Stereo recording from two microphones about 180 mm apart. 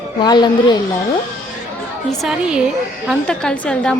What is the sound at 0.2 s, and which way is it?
Speech, 25° left (ahead or behind).